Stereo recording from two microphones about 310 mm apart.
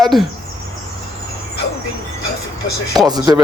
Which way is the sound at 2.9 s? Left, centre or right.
Centre.